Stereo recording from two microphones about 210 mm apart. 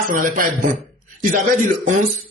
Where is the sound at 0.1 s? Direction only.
40° right (ahead or behind).